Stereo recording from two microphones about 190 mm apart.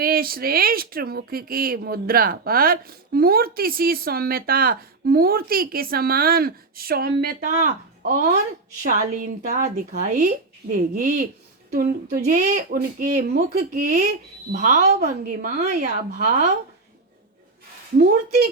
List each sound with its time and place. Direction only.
0.0 s speech: 50° right (ahead or behind)